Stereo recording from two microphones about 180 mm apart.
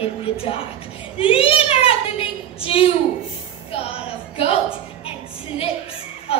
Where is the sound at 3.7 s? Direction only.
30° left (ahead or behind).